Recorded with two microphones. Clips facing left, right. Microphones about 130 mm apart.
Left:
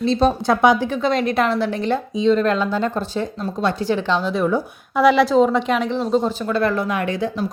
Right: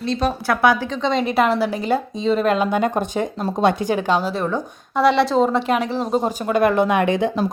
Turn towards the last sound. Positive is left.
turn(degrees=-20)  # may be behind; listen again after turning